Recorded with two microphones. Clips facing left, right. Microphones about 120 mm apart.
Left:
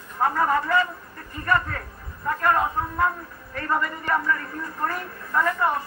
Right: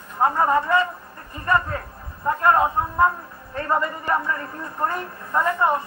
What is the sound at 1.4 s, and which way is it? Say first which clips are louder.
Speech: right 2 dB; 20° right (ahead or behind).